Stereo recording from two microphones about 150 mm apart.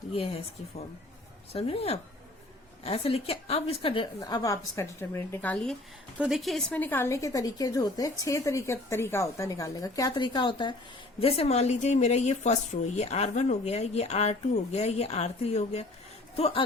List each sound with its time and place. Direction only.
1.5 s a woman's voice: 40° left (ahead or behind)
4.2 s a woman's voice: 25° left (ahead or behind); by 5.7 s 10° left (ahead or behind)
6.1 s a woman's voice: 5° right (ahead or behind); by 10.8 s 30° left (ahead or behind)
11.2 s a woman's voice: 40° left (ahead or behind)